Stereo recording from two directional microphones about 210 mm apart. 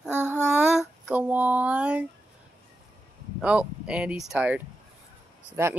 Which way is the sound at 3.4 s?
5° right (ahead or behind).